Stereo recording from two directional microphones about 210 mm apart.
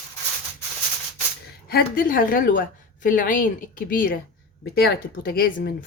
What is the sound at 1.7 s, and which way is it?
A woman's voice, 40° left (ahead or behind).